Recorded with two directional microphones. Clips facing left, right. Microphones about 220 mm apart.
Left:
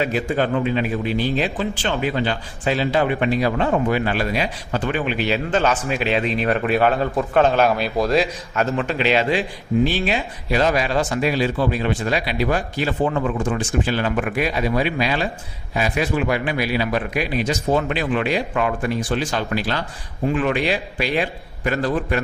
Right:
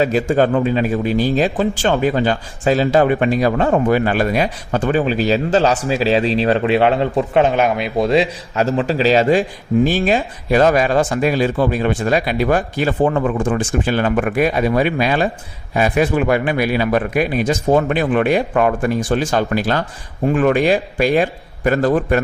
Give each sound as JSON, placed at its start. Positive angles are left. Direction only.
{"t": 0.0, "sound": "a man's voice", "side_deg": -40}
{"t": 7.4, "sound": "a man's voice", "side_deg": -15}